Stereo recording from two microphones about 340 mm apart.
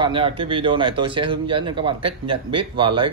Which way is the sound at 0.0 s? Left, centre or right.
Centre.